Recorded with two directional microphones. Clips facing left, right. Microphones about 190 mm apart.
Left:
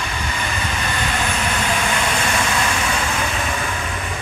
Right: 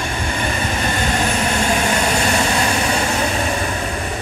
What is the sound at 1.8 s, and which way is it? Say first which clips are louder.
Vehicle: right 4 dB; 40° right (ahead or behind).